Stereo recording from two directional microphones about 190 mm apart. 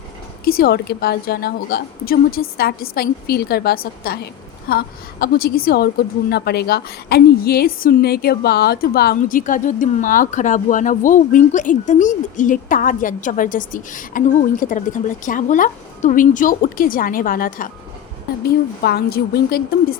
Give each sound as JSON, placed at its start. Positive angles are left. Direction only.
{"t": 0.4, "sound": "a woman's voice", "side_deg": 50}